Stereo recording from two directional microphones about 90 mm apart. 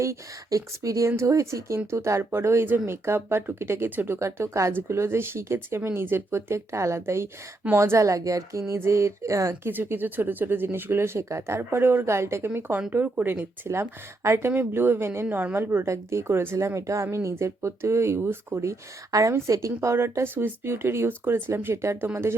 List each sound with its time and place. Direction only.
0.0 s a woman's voice: 35° right (ahead or behind); by 4.2 s 20° right (ahead or behind)
4.2 s a woman's voice: 30° right (ahead or behind)